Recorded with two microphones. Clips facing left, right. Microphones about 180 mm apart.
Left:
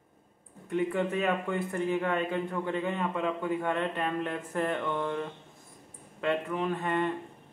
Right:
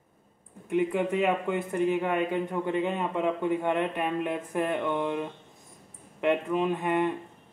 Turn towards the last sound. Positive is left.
turn(degrees=-15)  # may be behind; listen again after turning